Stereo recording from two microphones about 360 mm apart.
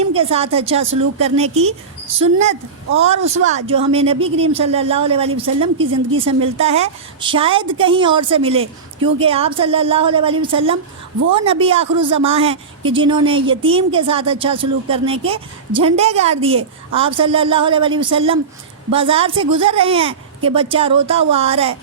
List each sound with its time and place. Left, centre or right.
0.0 s a woman's voice: centre
3.4 s a woman's voice: centre
5.8 s a woman's voice: right
6.4 s a woman's voice: centre